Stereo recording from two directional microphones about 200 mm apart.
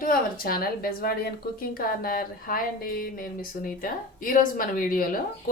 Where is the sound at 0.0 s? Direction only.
45° left (ahead or behind).